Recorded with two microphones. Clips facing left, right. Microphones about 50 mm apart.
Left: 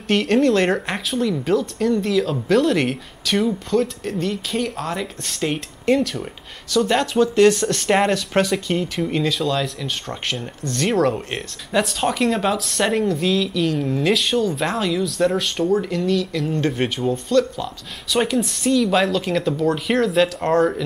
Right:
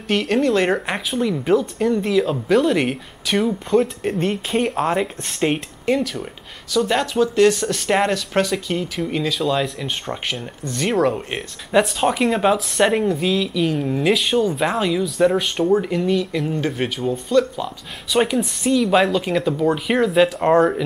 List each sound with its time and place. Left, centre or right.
0.1 s speech: centre
3.7 s speech: right
5.9 s speech: centre
16.5 s speech: centre
17.1 s speech: centre